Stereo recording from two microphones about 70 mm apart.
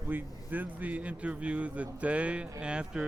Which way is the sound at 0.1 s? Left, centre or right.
Right.